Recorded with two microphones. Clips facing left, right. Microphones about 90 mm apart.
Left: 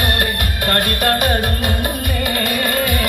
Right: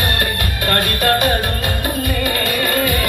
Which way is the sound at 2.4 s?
20° left (ahead or behind).